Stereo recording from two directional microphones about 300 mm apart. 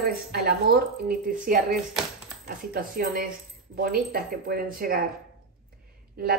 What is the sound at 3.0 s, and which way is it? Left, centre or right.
Speech, right.